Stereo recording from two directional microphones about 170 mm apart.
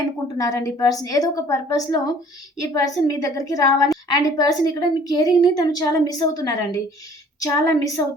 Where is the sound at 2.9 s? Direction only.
20° left (ahead or behind).